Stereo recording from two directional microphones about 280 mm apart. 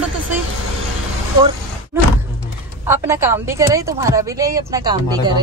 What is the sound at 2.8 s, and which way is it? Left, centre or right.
Speech, centre.